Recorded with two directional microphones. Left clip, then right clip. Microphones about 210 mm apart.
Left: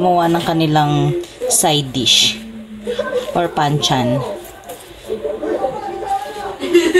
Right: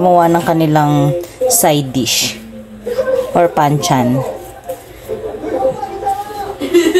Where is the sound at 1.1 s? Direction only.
40° right (ahead or behind).